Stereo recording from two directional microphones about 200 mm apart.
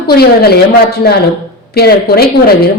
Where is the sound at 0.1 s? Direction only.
50° left (ahead or behind).